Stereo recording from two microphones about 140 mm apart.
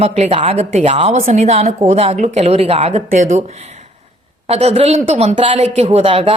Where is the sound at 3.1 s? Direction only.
60° right (ahead or behind).